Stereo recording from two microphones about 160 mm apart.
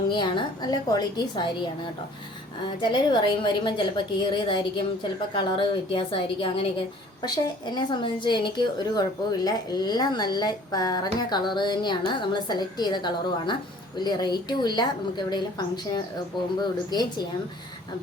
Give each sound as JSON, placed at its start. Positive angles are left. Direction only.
{"t": 0.1, "sound": "a woman's voice", "side_deg": 30}
{"t": 2.8, "sound": "a woman's voice", "side_deg": 30}
{"t": 16.9, "sound": "a woman's voice", "side_deg": 25}